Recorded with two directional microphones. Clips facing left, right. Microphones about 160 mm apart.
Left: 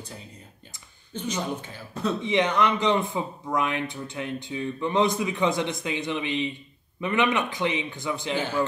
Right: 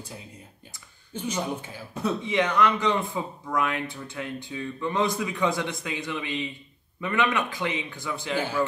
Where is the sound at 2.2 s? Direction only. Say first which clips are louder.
Left 1 dB; 20° left (ahead or behind).